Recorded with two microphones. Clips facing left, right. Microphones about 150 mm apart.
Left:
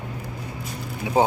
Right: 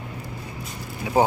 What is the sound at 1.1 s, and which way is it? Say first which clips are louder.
Speech: even; 20° left (ahead or behind).